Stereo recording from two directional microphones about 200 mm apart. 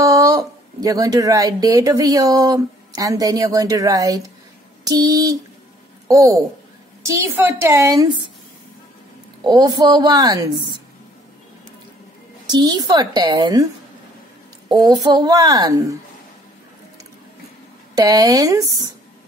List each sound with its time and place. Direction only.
0.0 s a woman's voice: 15° right (ahead or behind)
9.4 s a woman's voice: 20° right (ahead or behind)
12.4 s a woman's voice: 20° right (ahead or behind)
14.7 s a woman's voice: 20° right (ahead or behind)
17.9 s a woman's voice: 20° right (ahead or behind)